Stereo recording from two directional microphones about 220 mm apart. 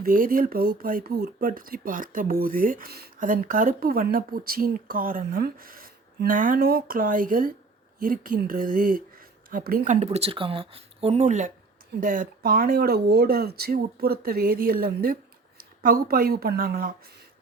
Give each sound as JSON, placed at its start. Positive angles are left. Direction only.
{"t": 0.0, "sound": "speech", "side_deg": -40}